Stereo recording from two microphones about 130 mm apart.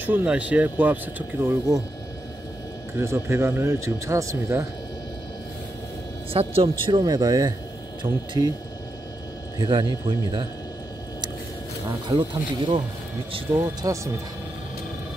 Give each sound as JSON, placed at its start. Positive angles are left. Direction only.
{"t": 0.0, "sound": "speech", "side_deg": -10}
{"t": 3.0, "sound": "a man's voice", "side_deg": -20}
{"t": 6.3, "sound": "a man's voice", "side_deg": -45}
{"t": 9.6, "sound": "a man's voice", "side_deg": -40}
{"t": 12.1, "sound": "a man's voice", "side_deg": -40}
{"t": 13.8, "sound": "a man's voice", "side_deg": -25}